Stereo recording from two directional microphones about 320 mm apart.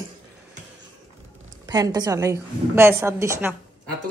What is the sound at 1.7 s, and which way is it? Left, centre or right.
A woman's voice, centre.